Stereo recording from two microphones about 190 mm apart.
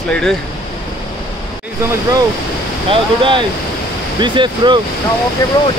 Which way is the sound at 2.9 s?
25° right (ahead or behind).